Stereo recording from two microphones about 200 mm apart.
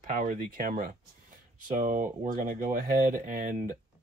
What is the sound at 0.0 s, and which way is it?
Speech, 40° right (ahead or behind).